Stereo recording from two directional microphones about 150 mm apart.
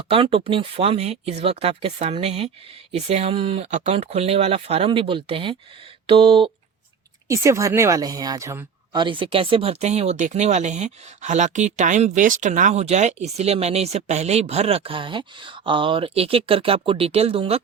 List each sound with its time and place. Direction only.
0.1 s speech: 40° right (ahead or behind)
7.3 s a woman's voice: 20° right (ahead or behind); by 17.6 s 40° right (ahead or behind)